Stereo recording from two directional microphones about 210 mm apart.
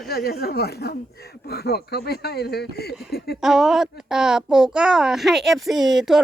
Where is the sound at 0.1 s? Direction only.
45° left (ahead or behind).